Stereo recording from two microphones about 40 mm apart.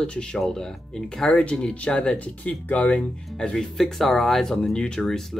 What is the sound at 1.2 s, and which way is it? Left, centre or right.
Speech, left.